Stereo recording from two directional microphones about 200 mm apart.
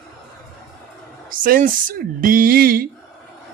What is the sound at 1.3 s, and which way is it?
A man's voice, 45° right (ahead or behind).